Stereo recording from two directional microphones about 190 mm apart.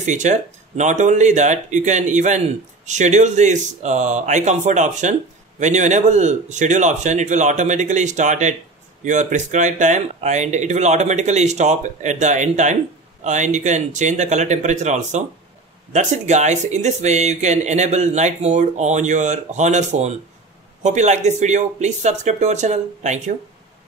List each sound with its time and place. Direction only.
0.0 s speech: 40° right (ahead or behind)